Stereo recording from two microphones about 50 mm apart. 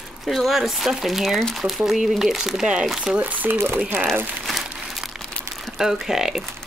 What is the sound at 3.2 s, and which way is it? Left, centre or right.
Speech, right.